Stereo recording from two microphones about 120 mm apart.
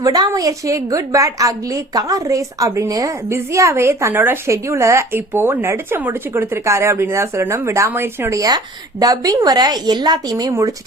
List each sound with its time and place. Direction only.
0.0 s a woman's voice: 30° right (ahead or behind)